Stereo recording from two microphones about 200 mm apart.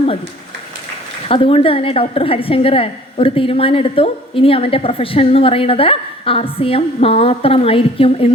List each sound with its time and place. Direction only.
1.3 s a woman's voice: 25° left (ahead or behind)